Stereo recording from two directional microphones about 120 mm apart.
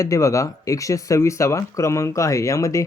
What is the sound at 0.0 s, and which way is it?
Speech, 25° left (ahead or behind).